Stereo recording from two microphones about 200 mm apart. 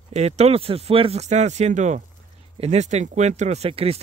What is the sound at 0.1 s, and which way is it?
Speech, 35° right (ahead or behind).